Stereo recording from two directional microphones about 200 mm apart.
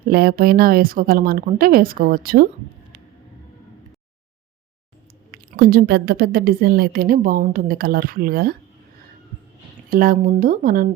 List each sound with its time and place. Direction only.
0.0 s a woman's voice: 50° right (ahead or behind)
5.5 s a woman's voice: 50° right (ahead or behind)
9.9 s a woman's voice: 45° right (ahead or behind)